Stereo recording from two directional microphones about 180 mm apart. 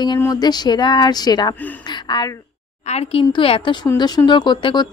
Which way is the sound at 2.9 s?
35° left (ahead or behind).